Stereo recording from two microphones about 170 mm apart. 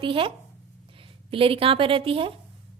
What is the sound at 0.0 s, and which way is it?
A woman's voice, 30° right (ahead or behind).